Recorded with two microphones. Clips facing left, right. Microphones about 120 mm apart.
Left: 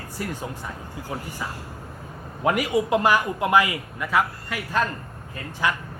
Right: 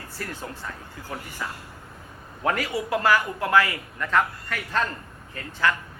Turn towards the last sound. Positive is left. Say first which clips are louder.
# even
turn(degrees=15)  # may be behind; listen again after turning